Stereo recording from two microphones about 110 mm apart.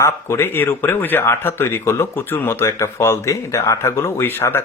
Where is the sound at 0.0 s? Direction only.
25° left (ahead or behind).